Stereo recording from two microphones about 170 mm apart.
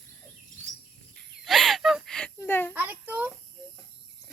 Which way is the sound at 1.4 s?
Centre (ahead or behind).